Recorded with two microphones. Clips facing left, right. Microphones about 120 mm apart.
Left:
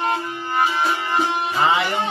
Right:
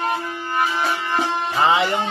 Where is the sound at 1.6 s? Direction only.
25° right (ahead or behind).